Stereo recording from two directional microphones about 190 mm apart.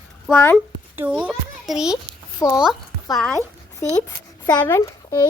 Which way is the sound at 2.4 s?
15° left (ahead or behind).